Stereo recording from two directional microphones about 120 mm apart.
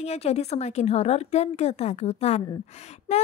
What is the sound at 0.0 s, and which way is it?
A woman's voice, 65° left (ahead or behind).